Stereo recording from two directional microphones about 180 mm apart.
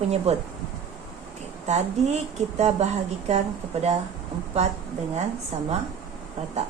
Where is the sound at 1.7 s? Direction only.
40° right (ahead or behind).